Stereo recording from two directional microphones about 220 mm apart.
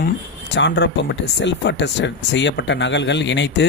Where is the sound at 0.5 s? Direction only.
55° left (ahead or behind).